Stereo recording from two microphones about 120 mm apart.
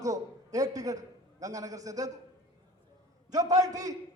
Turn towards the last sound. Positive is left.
turn(degrees=-30)  # may be behind; listen again after turning